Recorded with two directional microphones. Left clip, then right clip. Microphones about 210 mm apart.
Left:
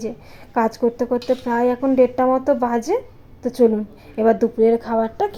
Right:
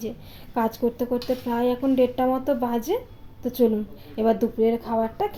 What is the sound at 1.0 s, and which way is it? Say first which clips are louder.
Speech: left 6 dB; 15° left (ahead or behind).